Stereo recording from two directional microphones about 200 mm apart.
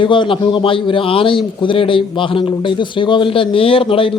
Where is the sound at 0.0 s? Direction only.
25° left (ahead or behind).